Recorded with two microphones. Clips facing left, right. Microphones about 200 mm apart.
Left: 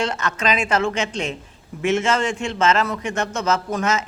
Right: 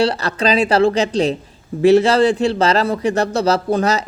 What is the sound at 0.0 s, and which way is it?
A man's voice, 35° right (ahead or behind).